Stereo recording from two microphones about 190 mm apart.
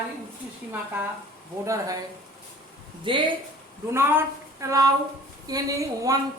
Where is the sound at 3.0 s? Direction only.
25° right (ahead or behind).